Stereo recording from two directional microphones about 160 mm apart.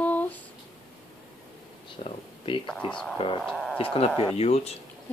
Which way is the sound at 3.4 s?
Centre (ahead or behind).